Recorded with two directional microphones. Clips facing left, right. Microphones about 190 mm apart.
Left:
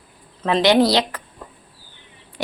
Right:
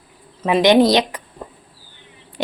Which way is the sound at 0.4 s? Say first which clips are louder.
Right 3 dB; 15° right (ahead or behind).